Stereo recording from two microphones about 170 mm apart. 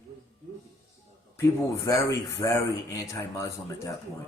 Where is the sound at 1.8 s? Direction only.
20° left (ahead or behind).